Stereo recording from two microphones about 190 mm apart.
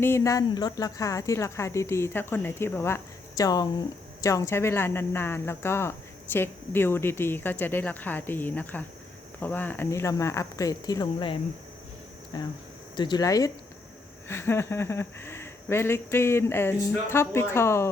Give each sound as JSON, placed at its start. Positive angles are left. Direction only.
{"t": 0.0, "sound": "speech", "side_deg": 15}